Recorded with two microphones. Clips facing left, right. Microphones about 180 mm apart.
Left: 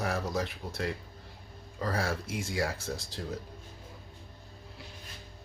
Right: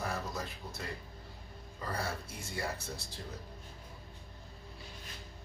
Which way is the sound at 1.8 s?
90° left.